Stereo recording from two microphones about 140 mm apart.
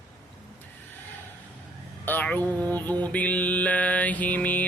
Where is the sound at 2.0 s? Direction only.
10° left (ahead or behind).